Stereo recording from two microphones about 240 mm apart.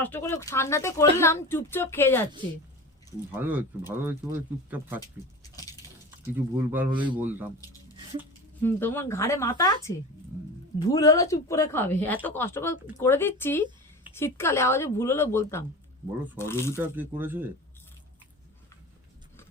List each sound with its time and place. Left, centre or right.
0.0 s speech: centre
3.3 s speech: centre
6.3 s speech: centre
6.9 s speech: centre
7.2 s speech: centre
8.6 s speech: centre
16.8 s speech: centre